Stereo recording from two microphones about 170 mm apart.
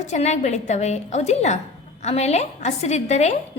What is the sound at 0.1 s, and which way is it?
A woman's voice, 45° left (ahead or behind).